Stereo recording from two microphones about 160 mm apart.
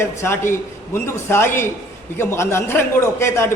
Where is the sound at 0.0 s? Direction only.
15° left (ahead or behind).